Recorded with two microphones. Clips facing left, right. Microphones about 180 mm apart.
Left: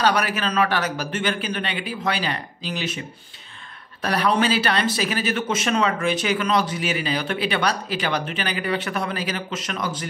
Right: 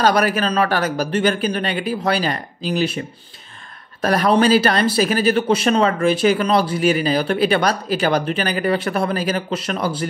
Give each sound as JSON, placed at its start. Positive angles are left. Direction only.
{"t": 0.0, "sound": "speech", "side_deg": -40}